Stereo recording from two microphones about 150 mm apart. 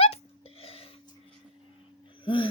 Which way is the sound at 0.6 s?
40° left (ahead or behind).